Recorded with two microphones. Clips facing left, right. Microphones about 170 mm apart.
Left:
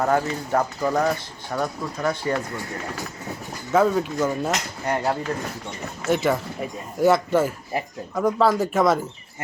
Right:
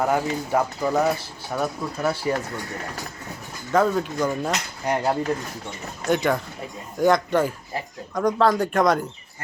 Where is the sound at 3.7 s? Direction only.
5° left (ahead or behind).